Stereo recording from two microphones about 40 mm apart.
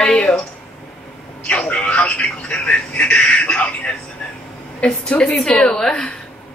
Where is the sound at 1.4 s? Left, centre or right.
Left.